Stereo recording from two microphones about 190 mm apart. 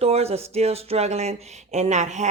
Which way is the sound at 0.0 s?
35° right (ahead or behind).